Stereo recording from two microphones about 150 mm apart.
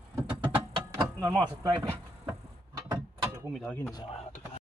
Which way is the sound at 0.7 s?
25° right (ahead or behind).